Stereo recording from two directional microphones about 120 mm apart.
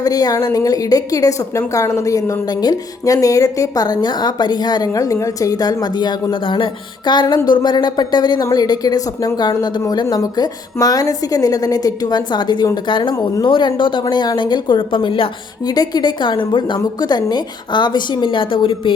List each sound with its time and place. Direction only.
0.0 s a woman's voice: 30° left (ahead or behind)
13.1 s speech: 30° left (ahead or behind)
13.5 s a woman's voice: 40° left (ahead or behind)